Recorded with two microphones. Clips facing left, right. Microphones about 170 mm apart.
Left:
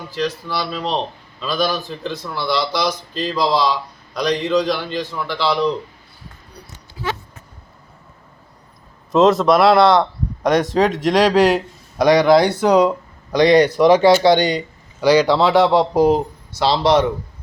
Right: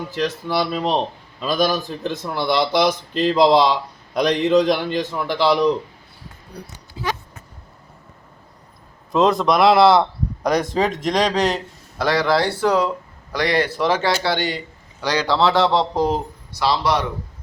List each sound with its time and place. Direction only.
0.5 s a man's voice: 50° right (ahead or behind)
7.0 s a sound: 20° right (ahead or behind)
9.1 s speech: centre (ahead or behind)
16.5 s speech: 25° left (ahead or behind)